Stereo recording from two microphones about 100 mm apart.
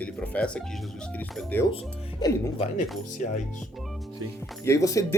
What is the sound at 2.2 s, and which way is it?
Speech, 30° left (ahead or behind).